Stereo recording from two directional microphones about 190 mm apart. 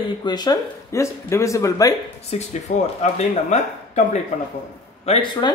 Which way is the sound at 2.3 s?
35° left (ahead or behind).